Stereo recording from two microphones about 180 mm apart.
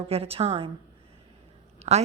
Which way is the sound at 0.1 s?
35° right (ahead or behind).